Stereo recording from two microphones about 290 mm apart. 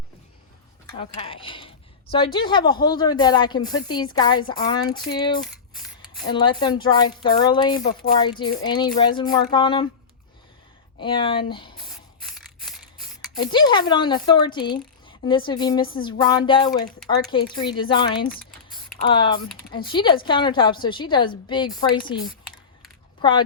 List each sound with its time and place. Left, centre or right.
0.9 s speech: centre
5.5 s a sound: centre
6.2 s speech: centre
11.0 s speech: centre
11.9 s a sound: centre
13.4 s speech: centre
23.2 s speech: centre